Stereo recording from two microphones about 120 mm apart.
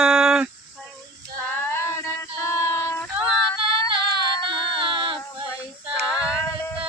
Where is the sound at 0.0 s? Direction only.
5° right (ahead or behind).